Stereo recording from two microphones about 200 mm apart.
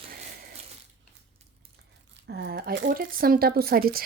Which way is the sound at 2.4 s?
55° right (ahead or behind).